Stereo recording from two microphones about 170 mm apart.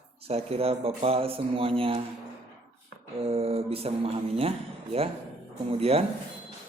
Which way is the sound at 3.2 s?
35° right (ahead or behind).